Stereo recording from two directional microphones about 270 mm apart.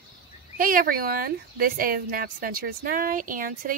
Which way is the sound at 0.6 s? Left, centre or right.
Right.